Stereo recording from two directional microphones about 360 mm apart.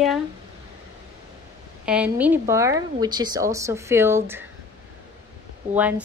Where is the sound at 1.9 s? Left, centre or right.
Centre.